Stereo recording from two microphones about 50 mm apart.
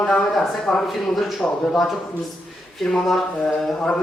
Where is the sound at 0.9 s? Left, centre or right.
Centre.